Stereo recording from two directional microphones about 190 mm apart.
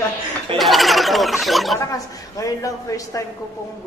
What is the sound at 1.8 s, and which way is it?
A man's voice, 15° left (ahead or behind).